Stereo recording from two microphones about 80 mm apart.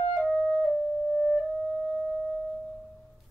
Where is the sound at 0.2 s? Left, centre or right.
Centre.